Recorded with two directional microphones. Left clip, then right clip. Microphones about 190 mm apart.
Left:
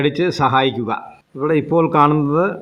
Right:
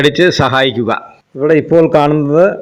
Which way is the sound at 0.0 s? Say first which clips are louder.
Right 7 dB; 15° right (ahead or behind).